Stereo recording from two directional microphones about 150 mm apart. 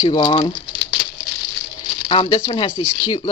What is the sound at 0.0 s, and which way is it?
Speech, 35° left (ahead or behind).